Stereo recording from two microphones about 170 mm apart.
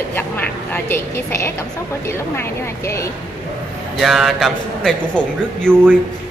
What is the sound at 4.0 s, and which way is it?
A man's voice, centre (ahead or behind).